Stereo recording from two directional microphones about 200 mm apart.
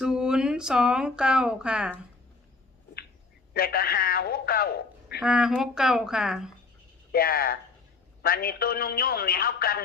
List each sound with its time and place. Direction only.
0.0 s speech: 5° right (ahead or behind)
3.5 s a man's voice: 50° left (ahead or behind)
5.2 s speech: 5° right (ahead or behind)
7.1 s a man's voice: 50° left (ahead or behind)